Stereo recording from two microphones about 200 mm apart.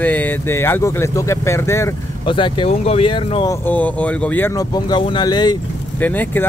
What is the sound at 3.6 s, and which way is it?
Speech, 10° left (ahead or behind).